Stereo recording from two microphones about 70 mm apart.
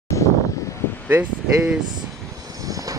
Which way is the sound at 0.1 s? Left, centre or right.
Left.